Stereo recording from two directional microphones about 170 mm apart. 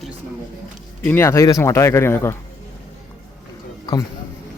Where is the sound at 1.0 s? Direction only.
10° left (ahead or behind).